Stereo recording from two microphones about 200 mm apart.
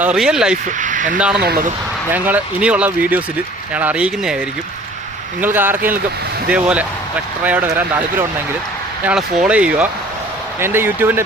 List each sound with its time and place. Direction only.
0.0 s speech: 5° right (ahead or behind)
0.8 s speech: 40° right (ahead or behind)
2.1 s speech: 10° right (ahead or behind)
5.4 s speech: 10° right (ahead or behind)